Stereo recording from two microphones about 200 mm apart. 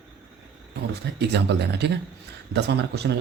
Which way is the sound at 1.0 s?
55° right (ahead or behind).